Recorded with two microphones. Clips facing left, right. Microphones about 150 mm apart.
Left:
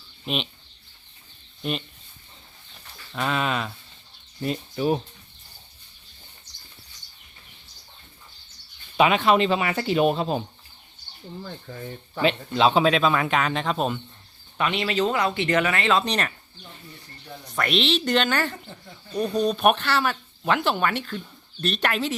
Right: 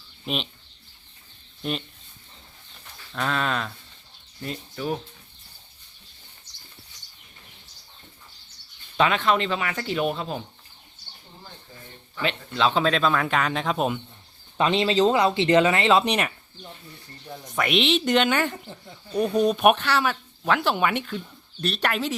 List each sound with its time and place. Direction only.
0.3 s speech: centre (ahead or behind)
1.6 s speech: centre (ahead or behind)
3.1 s speech: 5° left (ahead or behind)
4.4 s speech: 15° left (ahead or behind)
9.0 s speech: 15° left (ahead or behind)
12.2 s speech: 15° left (ahead or behind); by 14.0 s 5° right (ahead or behind)
14.6 s speech: 30° right (ahead or behind)
16.0 s speech: 10° right (ahead or behind)
17.5 s speech: 5° right (ahead or behind)